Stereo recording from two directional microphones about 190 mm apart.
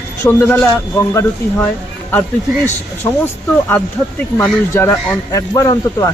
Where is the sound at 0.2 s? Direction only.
10° left (ahead or behind).